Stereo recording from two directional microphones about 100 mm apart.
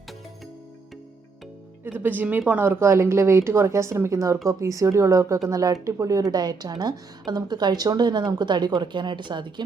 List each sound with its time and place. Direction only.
1.8 s a woman's voice: 20° right (ahead or behind); by 9.6 s 50° right (ahead or behind)